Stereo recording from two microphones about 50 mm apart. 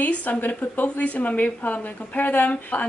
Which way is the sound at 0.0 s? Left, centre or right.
Left.